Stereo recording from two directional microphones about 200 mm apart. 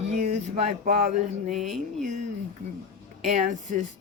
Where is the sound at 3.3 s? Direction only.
35° right (ahead or behind).